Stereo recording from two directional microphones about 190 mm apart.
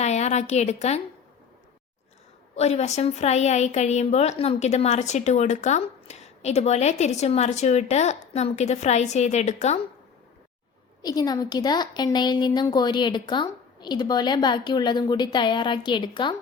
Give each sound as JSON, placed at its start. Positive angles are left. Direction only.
{"t": 0.0, "sound": "a woman's voice", "side_deg": 35}
{"t": 2.6, "sound": "a woman's voice", "side_deg": 35}
{"t": 11.0, "sound": "a woman's voice", "side_deg": 20}